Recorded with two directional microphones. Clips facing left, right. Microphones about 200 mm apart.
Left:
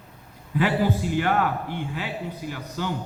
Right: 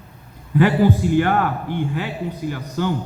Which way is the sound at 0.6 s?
50° right (ahead or behind).